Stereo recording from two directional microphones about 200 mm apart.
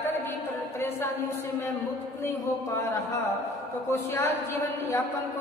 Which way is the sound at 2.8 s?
15° left (ahead or behind).